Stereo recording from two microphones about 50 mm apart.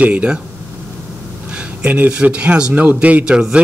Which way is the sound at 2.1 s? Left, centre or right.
Right.